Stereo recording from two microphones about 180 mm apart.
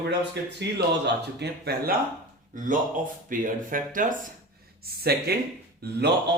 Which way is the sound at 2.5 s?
45° right (ahead or behind).